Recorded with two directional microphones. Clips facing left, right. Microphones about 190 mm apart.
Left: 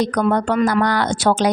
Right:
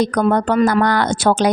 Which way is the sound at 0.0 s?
50° right (ahead or behind).